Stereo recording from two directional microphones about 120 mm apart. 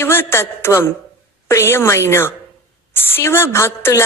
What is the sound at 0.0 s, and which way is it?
Speech, 20° left (ahead or behind).